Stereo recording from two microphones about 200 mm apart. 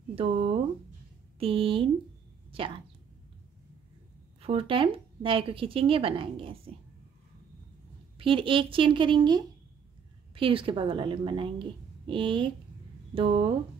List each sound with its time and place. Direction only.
0.1 s speech: 30° right (ahead or behind)
4.4 s speech: 30° right (ahead or behind)
8.2 s speech: 25° right (ahead or behind)